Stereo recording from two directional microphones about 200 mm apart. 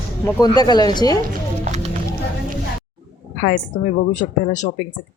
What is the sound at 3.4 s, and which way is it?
A woman's voice, 45° left (ahead or behind).